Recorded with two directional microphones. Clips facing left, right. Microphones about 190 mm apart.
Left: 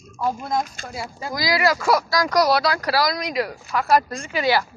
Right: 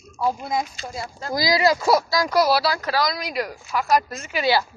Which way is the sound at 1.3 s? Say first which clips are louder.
Right 2 dB; 30° right (ahead or behind).